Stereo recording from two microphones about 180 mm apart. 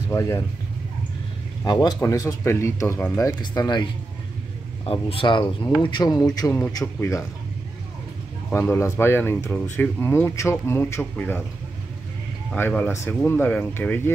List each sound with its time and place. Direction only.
0.1 s speech: 15° left (ahead or behind)
1.6 s speech: 20° left (ahead or behind)
4.8 s speech: 30° left (ahead or behind)
8.5 s speech: 10° left (ahead or behind)
12.5 s speech: 10° left (ahead or behind)